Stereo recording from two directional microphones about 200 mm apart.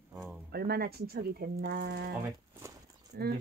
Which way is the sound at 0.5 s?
50° right (ahead or behind).